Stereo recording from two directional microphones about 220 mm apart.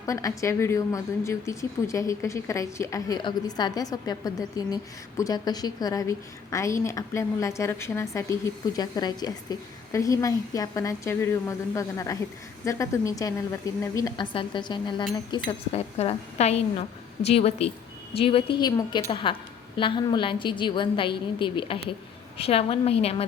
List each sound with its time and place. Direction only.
0.0 s a woman's voice: 15° left (ahead or behind)